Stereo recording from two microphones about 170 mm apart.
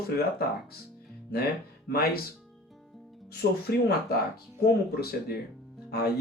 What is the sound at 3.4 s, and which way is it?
Speech, 65° left (ahead or behind).